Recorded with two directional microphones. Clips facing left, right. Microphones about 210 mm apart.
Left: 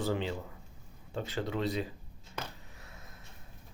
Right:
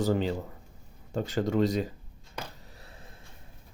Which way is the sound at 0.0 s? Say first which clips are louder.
Right 6 dB; 40° right (ahead or behind).